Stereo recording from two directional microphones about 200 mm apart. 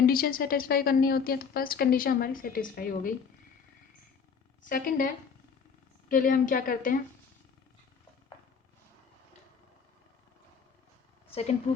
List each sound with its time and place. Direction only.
0.0 s a woman's voice: 45° left (ahead or behind)
4.6 s a woman's voice: 45° left (ahead or behind)
6.1 s a woman's voice: 45° left (ahead or behind)